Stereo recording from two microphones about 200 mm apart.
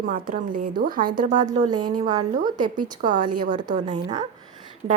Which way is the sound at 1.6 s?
20° right (ahead or behind).